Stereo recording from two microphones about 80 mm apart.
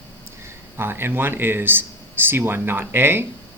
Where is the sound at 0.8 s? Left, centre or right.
Right.